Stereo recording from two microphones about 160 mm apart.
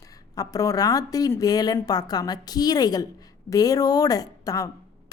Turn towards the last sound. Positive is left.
turn(degrees=20)  # may be behind; listen again after turning